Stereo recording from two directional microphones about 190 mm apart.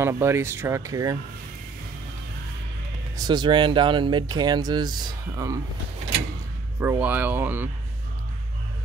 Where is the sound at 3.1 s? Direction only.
20° right (ahead or behind).